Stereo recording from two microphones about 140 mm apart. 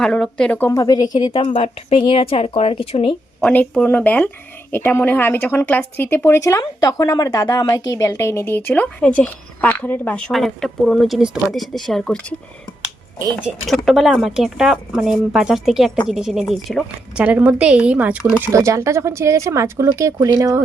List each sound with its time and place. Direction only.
0.0 s speech: 5° left (ahead or behind)
0.7 s a woman's voice: 25° left (ahead or behind)
1.5 s speech: 45° left (ahead or behind)
3.4 s speech: 10° left (ahead or behind)
13.3 s a woman's voice: centre (ahead or behind)
18.4 s speech: 20° right (ahead or behind)